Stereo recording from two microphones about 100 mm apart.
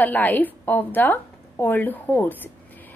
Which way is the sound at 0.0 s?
15° left (ahead or behind).